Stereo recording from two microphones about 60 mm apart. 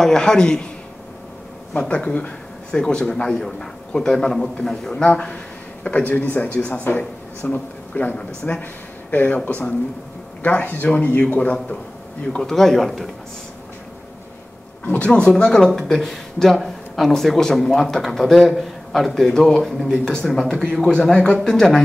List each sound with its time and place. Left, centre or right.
0.0 s speech: centre
1.8 s speech: centre
8.4 s speech: centre
9.1 s speech: left
10.4 s speech: left
12.4 s speech: centre
14.9 s speech: centre